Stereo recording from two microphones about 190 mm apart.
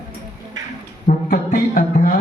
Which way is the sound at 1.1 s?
45° left (ahead or behind).